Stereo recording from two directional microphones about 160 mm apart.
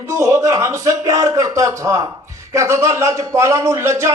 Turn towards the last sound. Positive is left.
turn(degrees=-20)  # may be behind; listen again after turning